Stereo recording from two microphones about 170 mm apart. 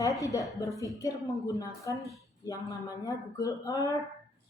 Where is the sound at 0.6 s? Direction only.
20° left (ahead or behind).